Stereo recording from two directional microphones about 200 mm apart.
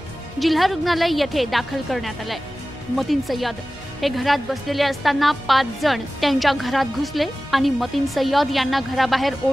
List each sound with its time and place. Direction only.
0.4 s a woman's voice: centre (ahead or behind)